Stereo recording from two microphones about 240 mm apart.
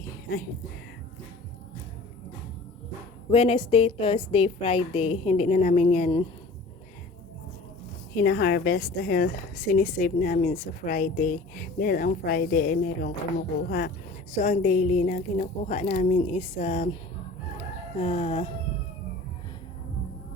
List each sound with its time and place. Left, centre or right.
3.3 s a woman's voice: left
8.1 s a woman's voice: left
18.0 s a woman's voice: left